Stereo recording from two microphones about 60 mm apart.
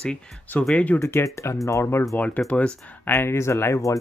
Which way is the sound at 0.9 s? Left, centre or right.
Left.